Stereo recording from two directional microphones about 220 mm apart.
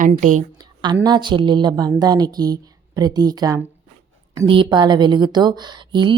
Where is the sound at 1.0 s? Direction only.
20° right (ahead or behind).